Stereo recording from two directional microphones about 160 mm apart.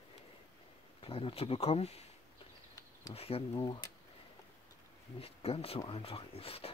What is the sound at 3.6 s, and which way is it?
Speech, 25° left (ahead or behind).